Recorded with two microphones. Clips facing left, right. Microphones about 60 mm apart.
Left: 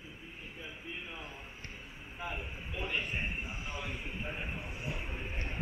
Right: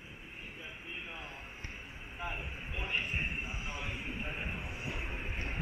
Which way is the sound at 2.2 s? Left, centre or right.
Centre.